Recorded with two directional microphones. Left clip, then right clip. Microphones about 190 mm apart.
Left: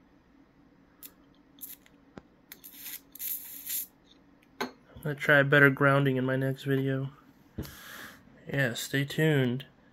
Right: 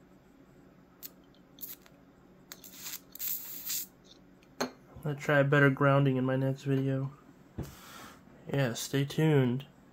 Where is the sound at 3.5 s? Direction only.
55° right (ahead or behind).